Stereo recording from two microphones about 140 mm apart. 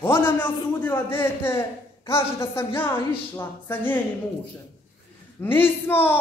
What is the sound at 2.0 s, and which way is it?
A man's voice, 20° left (ahead or behind).